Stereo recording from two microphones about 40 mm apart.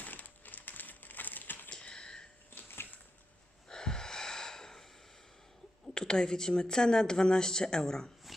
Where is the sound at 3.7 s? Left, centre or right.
Centre.